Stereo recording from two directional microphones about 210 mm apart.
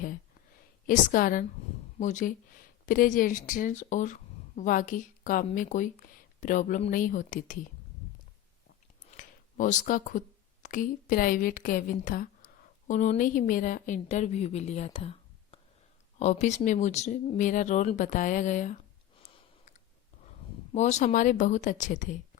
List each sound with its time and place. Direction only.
0.9 s a woman's voice: 40° left (ahead or behind)
9.0 s a woman's voice: 35° left (ahead or behind)
19.2 s a sound: 30° left (ahead or behind)
20.7 s a woman's voice: 35° left (ahead or behind)